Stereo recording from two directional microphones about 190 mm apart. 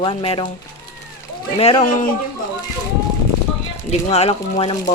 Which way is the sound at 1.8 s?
45° left (ahead or behind).